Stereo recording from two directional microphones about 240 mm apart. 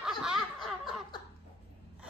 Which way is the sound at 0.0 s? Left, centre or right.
Centre.